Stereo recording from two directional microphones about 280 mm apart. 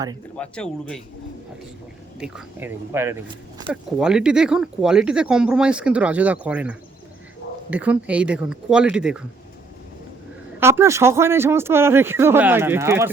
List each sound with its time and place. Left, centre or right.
0.3 s speech: centre
2.1 s a man's voice: centre
10.6 s a man's voice: centre